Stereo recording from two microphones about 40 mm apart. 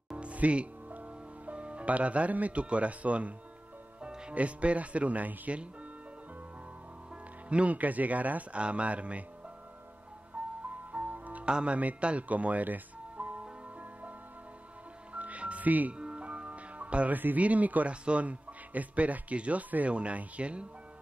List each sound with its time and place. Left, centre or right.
0.2 s music: right
2.6 s speech: right
7.4 s speech: right
8.5 s speech: right
10.3 s music: right
11.4 s speech: right
15.1 s music: right
15.9 s music: right
17.1 s speech: right
17.4 s speech: right